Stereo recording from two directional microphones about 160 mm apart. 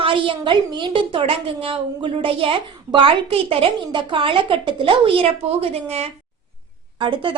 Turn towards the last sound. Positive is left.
turn(degrees=-30)  # may be behind; listen again after turning